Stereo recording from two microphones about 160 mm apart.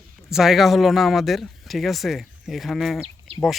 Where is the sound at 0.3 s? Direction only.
Centre (ahead or behind).